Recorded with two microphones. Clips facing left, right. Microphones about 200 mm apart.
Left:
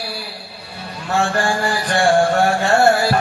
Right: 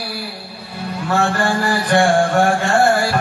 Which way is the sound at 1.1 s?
60° right (ahead or behind).